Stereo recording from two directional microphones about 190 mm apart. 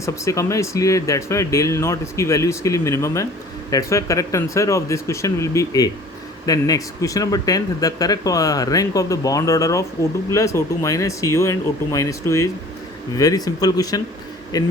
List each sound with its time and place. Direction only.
0.0 s speech: 15° left (ahead or behind)
13.1 s speech: 20° left (ahead or behind)